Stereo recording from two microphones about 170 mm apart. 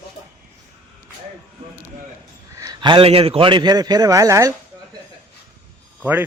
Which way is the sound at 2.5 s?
25° right (ahead or behind).